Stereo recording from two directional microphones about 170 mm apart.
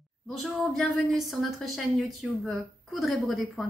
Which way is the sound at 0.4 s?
Centre (ahead or behind).